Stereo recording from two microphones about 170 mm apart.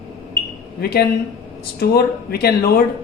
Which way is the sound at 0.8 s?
65° left (ahead or behind).